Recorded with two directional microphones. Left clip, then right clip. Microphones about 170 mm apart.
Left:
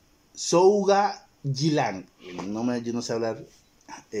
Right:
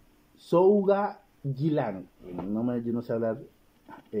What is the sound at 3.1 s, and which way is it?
Speech, 30° left (ahead or behind).